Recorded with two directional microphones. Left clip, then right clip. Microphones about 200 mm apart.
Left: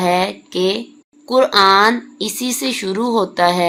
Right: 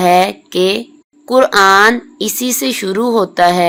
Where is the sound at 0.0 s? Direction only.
30° right (ahead or behind).